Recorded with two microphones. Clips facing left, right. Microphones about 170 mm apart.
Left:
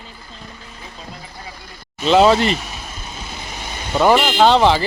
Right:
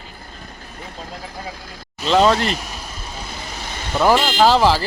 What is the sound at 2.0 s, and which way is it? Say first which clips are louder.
Speech: left 3 dB; 5° left (ahead or behind).